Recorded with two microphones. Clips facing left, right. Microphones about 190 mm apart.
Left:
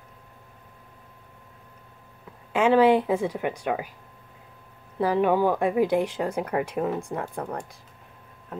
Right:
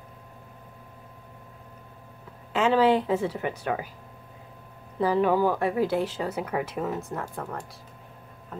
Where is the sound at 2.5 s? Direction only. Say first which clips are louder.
Left 3 dB; 10° left (ahead or behind).